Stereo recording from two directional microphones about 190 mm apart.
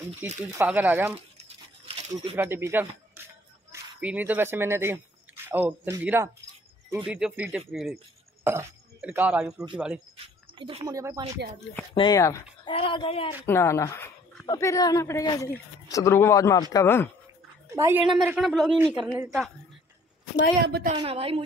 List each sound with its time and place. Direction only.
0.2 s speech: 10° right (ahead or behind)
2.3 s speech: 10° right (ahead or behind)
3.2 s music: 10° right (ahead or behind)
3.7 s speech: 10° right (ahead or behind)
8.5 s speech: 10° right (ahead or behind)
10.1 s a sound: 30° right (ahead or behind)
10.9 s speech: 20° right (ahead or behind)
11.9 s speech: 20° left (ahead or behind)
12.7 s speech: 30° left (ahead or behind)
13.5 s a woman's voice: 15° left (ahead or behind)
17.6 s a woman's voice: 15° right (ahead or behind)
18.0 s speech: 5° right (ahead or behind)
21.0 s a woman's voice: 30° right (ahead or behind)